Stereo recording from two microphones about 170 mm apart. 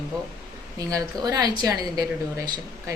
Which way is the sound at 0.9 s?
20° right (ahead or behind).